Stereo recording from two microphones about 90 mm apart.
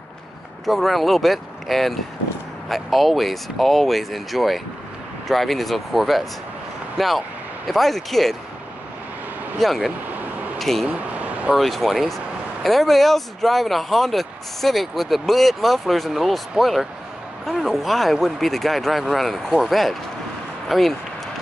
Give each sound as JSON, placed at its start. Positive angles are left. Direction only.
{"t": 0.7, "sound": "speech", "side_deg": 0}
{"t": 9.6, "sound": "speech", "side_deg": 0}
{"t": 10.9, "sound": "vehicle", "side_deg": -15}
{"t": 11.5, "sound": "speech", "side_deg": 0}